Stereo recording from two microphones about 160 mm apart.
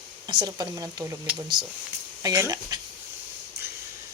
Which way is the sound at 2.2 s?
20° right (ahead or behind).